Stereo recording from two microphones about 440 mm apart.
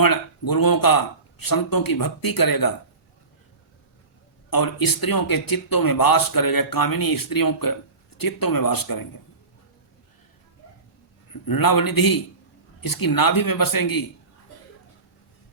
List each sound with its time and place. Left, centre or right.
0.0 s speech: left
4.5 s speech: left
11.4 s speech: left